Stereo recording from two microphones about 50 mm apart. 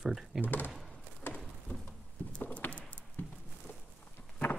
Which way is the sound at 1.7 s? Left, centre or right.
Left.